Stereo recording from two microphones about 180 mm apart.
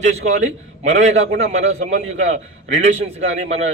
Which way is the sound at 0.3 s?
40° right (ahead or behind).